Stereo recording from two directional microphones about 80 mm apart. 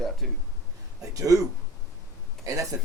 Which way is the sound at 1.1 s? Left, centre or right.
Right.